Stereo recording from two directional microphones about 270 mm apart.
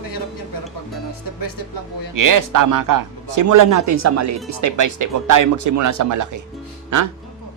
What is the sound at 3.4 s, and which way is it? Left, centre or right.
Speech, right.